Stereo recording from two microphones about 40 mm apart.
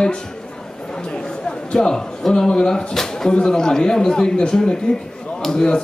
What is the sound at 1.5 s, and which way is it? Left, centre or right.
A man's voice, centre.